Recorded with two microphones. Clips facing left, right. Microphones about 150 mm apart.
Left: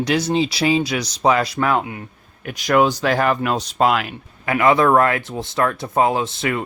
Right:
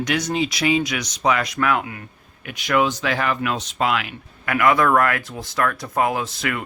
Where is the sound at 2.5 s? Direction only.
40° left (ahead or behind).